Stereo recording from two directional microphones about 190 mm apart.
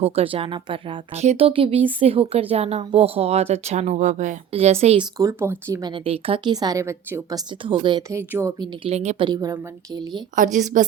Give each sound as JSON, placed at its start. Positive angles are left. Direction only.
{"t": 0.0, "sound": "speech", "side_deg": -30}
{"t": 5.1, "sound": "speech", "side_deg": -15}
{"t": 8.8, "sound": "speech", "side_deg": -35}
{"t": 10.3, "sound": "a woman's voice", "side_deg": -45}